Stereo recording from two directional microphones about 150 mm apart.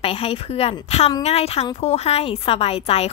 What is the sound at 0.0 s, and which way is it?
A woman's voice, 40° left (ahead or behind).